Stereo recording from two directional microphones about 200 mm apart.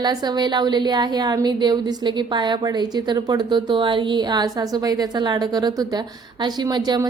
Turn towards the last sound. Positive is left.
turn(degrees=-20)  # may be behind; listen again after turning